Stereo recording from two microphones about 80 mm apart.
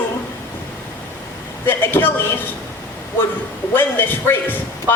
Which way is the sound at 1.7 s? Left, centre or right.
Left.